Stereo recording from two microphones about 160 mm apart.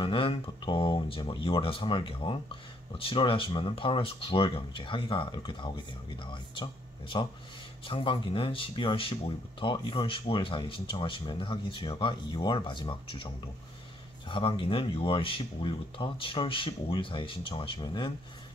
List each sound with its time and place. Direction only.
0.0 s speech: 35° left (ahead or behind)
14.3 s speech: 35° left (ahead or behind)